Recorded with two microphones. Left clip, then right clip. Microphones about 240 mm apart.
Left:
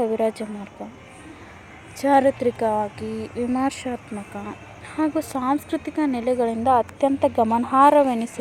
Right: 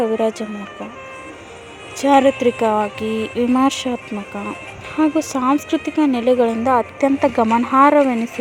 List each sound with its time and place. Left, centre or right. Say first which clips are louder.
0.0 s speech: right 4 dB; centre
2.0 s speech: right 4 dB; right
3.2 s speech: right 8 dB; centre
3.5 s speech: right 7 dB; right
4.9 s speech: right 6 dB; right
7.3 s speech: right 4 dB; right
7.7 s speech: right 2 dB; right